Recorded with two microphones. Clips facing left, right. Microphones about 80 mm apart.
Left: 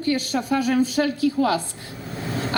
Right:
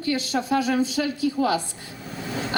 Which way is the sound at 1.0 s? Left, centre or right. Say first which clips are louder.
Left 3 dB; left.